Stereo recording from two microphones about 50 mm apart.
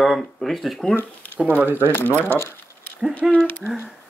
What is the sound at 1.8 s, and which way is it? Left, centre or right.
Speech, left.